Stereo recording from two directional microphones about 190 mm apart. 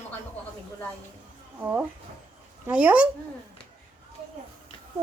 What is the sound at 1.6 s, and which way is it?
Speech, 10° right (ahead or behind).